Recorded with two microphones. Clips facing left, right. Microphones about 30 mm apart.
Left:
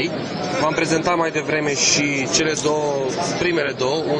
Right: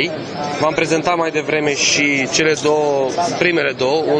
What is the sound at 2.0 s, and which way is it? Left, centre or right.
A man's voice, right.